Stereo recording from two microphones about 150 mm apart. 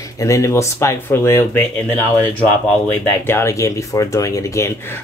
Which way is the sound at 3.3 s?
20° left (ahead or behind).